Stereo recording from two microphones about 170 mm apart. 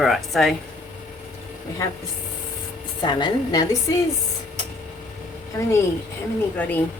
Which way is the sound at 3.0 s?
25° left (ahead or behind).